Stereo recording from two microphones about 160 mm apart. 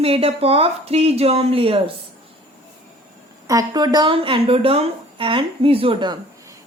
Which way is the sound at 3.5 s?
25° right (ahead or behind).